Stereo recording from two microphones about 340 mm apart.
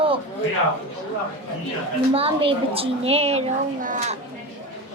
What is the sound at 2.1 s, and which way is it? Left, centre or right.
A woman's voice, centre.